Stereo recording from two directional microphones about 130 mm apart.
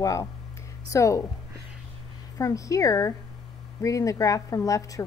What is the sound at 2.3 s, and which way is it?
Speech, 25° left (ahead or behind).